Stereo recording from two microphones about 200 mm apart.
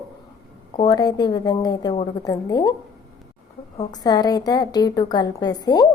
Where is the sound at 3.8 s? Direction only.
20° left (ahead or behind).